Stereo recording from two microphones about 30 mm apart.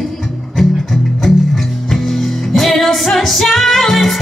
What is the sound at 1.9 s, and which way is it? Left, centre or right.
Music, centre.